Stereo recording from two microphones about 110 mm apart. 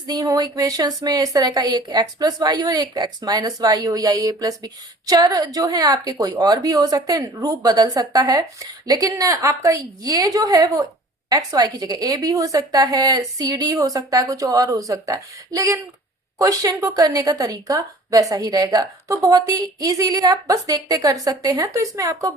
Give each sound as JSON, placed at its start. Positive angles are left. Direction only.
{"t": 0.1, "sound": "a woman's voice", "side_deg": -35}